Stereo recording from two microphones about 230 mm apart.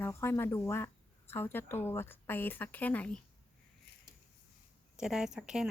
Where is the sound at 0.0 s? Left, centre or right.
Centre.